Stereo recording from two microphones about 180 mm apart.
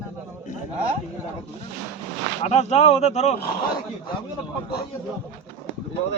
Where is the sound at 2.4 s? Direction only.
40° left (ahead or behind).